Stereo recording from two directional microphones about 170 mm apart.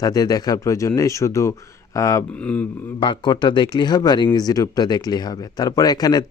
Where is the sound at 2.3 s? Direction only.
5° left (ahead or behind).